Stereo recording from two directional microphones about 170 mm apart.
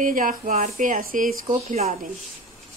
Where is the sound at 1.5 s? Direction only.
40° right (ahead or behind).